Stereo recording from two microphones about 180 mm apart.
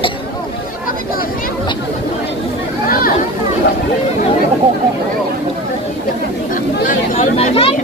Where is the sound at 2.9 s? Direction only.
55° left (ahead or behind).